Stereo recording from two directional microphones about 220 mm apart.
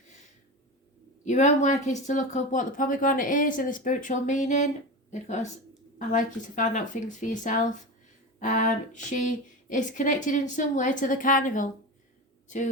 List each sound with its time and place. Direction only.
1.2 s speech: 35° left (ahead or behind)
6.0 s speech: 35° left (ahead or behind)